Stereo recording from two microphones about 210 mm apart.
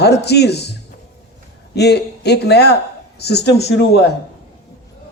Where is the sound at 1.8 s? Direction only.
50° left (ahead or behind).